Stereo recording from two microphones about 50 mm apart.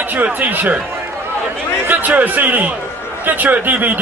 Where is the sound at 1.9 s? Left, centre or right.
Right.